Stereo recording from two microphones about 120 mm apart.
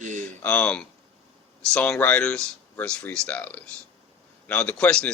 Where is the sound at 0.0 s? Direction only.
90° right.